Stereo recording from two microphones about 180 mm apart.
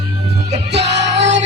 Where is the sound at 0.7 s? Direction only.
75° right (ahead or behind).